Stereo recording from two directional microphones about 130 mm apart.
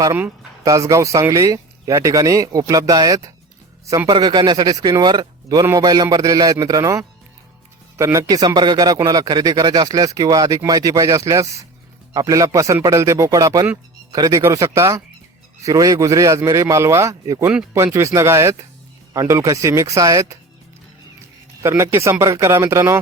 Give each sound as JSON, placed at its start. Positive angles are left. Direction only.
{"t": 0.0, "sound": "speech", "side_deg": -20}
{"t": 21.6, "sound": "speech", "side_deg": -20}